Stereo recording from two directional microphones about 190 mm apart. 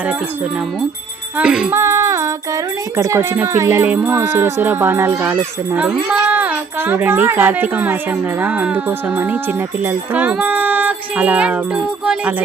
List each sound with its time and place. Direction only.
1.4 s speech: 5° right (ahead or behind)
1.8 s female singing: 15° right (ahead or behind)
2.9 s speech: 15° right (ahead or behind)